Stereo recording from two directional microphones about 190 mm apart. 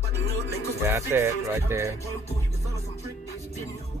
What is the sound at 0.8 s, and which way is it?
Speech, 15° right (ahead or behind).